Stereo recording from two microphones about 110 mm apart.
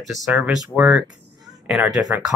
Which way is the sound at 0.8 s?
10° right (ahead or behind).